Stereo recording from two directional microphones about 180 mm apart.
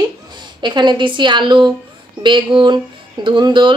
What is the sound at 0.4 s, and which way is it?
A woman's voice, 25° right (ahead or behind).